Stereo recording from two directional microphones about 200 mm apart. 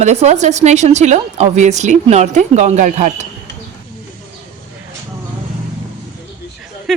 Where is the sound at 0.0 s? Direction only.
35° right (ahead or behind).